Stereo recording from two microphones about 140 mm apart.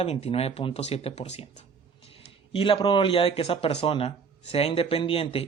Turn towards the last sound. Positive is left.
turn(degrees=40)  # may be behind; listen again after turning